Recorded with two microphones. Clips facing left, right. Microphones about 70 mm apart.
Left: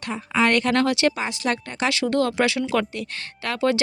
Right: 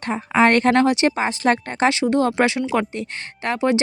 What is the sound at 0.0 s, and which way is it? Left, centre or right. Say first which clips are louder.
Speech: right 5 dB; right.